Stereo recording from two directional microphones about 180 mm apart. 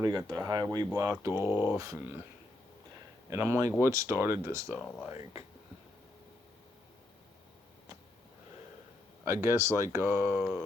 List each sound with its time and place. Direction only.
0.0 s speech: 20° right (ahead or behind)
3.2 s speech: 15° right (ahead or behind)
4.7 s speech: 5° left (ahead or behind)
9.2 s speech: 15° right (ahead or behind)